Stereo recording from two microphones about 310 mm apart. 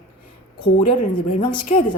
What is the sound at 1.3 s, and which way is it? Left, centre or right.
Speech, centre.